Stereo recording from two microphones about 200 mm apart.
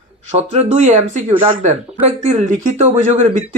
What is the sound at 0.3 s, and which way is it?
Speech, 30° right (ahead or behind).